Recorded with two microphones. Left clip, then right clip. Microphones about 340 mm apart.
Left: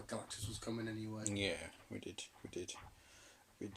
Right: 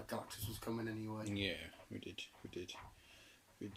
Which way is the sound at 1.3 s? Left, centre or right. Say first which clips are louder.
Left 3 dB; centre.